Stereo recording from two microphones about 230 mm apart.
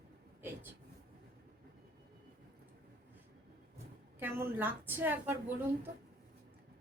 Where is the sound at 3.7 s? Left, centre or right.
Centre.